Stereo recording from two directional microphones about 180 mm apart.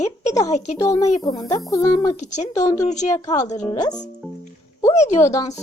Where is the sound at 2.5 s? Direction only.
20° left (ahead or behind).